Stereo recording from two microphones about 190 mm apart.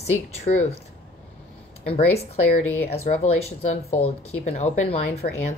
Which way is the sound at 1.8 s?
30° left (ahead or behind).